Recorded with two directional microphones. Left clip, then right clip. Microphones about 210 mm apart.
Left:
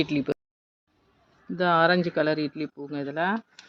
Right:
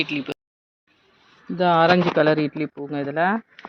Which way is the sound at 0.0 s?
45° left (ahead or behind).